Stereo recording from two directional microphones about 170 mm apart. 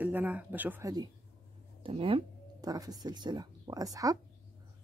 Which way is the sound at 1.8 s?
30° right (ahead or behind).